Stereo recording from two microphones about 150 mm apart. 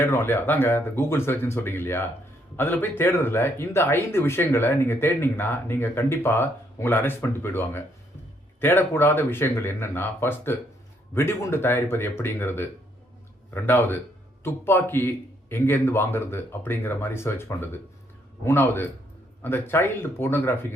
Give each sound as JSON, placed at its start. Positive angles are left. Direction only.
{"t": 0.0, "sound": "speech", "side_deg": 15}